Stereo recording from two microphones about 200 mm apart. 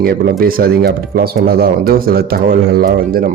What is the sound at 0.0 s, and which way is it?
Speech, 50° right (ahead or behind).